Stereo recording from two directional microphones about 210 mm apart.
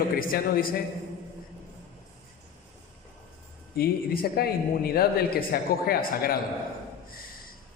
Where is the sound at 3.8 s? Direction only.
45° left (ahead or behind).